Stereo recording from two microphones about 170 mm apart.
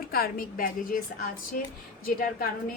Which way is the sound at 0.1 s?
60° left (ahead or behind).